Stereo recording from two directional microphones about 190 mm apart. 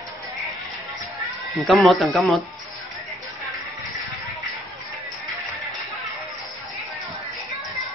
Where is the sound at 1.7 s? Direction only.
Centre (ahead or behind).